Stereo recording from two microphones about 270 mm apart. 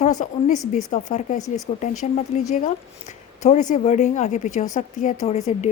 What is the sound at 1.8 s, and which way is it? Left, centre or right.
A woman's voice, left.